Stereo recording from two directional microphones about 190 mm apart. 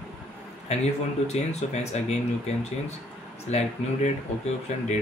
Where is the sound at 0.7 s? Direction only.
35° left (ahead or behind).